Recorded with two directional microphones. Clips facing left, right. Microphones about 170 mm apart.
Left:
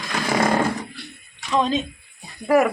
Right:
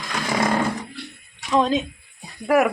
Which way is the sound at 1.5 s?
5° right (ahead or behind).